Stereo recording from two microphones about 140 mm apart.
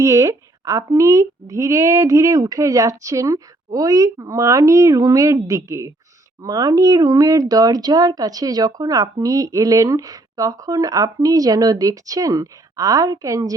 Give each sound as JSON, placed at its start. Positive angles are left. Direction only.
{"t": 0.0, "sound": "speech", "side_deg": -20}